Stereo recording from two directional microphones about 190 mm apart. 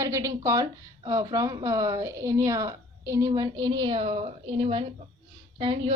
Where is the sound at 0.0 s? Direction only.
15° right (ahead or behind).